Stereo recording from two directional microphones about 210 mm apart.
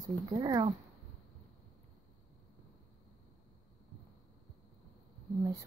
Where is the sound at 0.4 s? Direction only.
20° right (ahead or behind).